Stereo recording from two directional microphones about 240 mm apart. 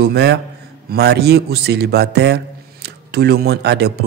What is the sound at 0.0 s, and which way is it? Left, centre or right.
A man's voice, right.